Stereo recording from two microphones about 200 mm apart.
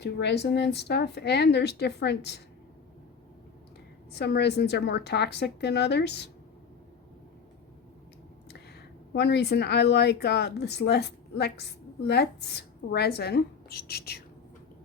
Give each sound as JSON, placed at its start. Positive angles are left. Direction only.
{"t": 0.0, "sound": "speech", "side_deg": 60}
{"t": 4.1, "sound": "speech", "side_deg": 55}
{"t": 9.1, "sound": "a woman's voice", "side_deg": 55}